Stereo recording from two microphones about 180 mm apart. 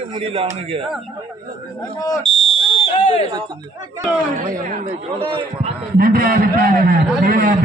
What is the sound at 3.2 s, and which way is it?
Speech, 25° right (ahead or behind).